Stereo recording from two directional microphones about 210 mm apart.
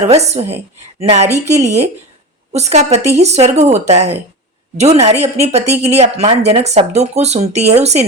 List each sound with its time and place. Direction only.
0.0 s speech: 30° right (ahead or behind)